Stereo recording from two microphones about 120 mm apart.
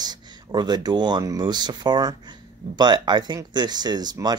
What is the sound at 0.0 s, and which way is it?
Speech, 35° right (ahead or behind).